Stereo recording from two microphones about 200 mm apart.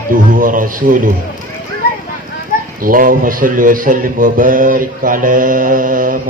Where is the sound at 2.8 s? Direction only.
45° right (ahead or behind).